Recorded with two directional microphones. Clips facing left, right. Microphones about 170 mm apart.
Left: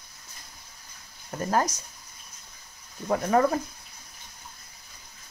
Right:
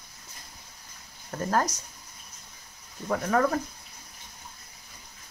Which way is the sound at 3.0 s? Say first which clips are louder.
Left 2 dB; 20° left (ahead or behind).